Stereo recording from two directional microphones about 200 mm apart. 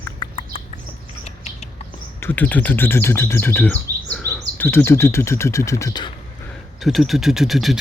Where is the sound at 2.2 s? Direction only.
10° left (ahead or behind).